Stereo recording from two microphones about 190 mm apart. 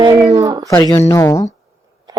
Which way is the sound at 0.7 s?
20° left (ahead or behind).